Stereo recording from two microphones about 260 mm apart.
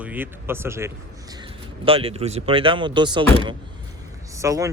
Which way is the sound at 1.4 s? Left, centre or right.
Right.